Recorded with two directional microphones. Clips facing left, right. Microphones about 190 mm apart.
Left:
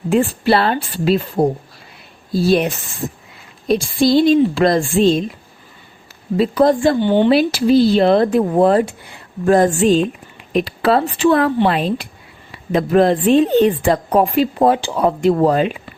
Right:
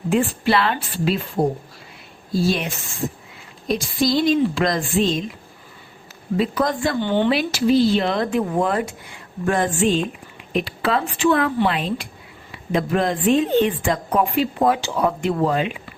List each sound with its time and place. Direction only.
0.1 s a woman's voice: 35° left (ahead or behind)
2.3 s a woman's voice: 35° left (ahead or behind)
3.7 s a woman's voice: 30° left (ahead or behind)
6.3 s a woman's voice: 30° left (ahead or behind)
7.0 s speech: 15° left (ahead or behind)
7.3 s a woman's voice: 35° left (ahead or behind)